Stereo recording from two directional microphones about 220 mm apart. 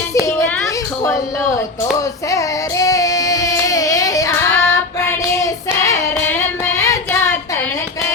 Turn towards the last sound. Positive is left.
turn(degrees=15)  # may be behind; listen again after turning